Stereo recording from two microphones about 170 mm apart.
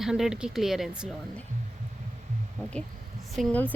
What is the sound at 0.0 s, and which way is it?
Speech, 5° right (ahead or behind).